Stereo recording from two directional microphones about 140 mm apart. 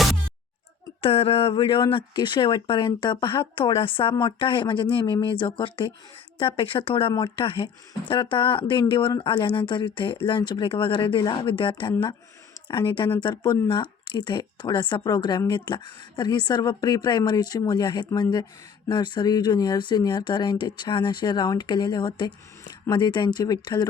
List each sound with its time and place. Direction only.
1.0 s speech: 45° left (ahead or behind)